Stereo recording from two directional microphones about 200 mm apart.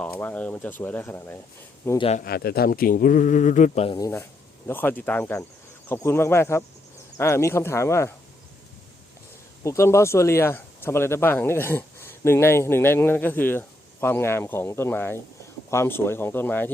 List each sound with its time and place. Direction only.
0.0 s speech: 10° left (ahead or behind)
2.0 s speech: 30° left (ahead or behind)
2.2 s speech: 50° left (ahead or behind); by 4.0 s 30° left (ahead or behind)
4.0 s speech: 15° left (ahead or behind)
9.6 s speech: 15° left (ahead or behind)